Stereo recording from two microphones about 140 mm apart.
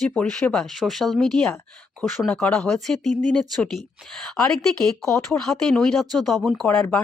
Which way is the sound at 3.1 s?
60° right (ahead or behind).